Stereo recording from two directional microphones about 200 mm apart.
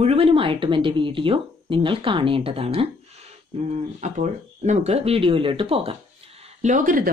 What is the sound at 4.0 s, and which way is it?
Speech, 35° right (ahead or behind).